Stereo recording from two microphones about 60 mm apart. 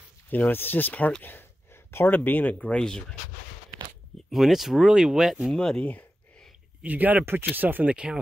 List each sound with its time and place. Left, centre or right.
0.3 s speech: left
2.8 s speech: centre
4.3 s speech: centre
5.6 s speech: centre
6.8 s speech: right
7.8 s speech: centre